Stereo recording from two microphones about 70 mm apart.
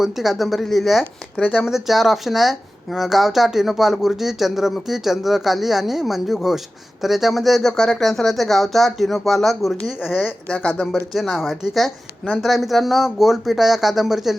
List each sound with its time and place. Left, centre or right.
0.0 s speech: centre
1.4 s speech: left
1.6 s speech: centre
10.5 s speech: centre
11.1 s speech: centre